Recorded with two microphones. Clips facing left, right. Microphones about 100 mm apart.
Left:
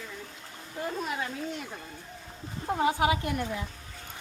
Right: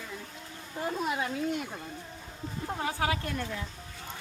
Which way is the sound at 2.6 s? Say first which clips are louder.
Left 6 dB; 20° left (ahead or behind).